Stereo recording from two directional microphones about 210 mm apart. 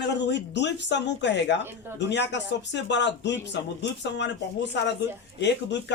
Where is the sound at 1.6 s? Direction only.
10° right (ahead or behind).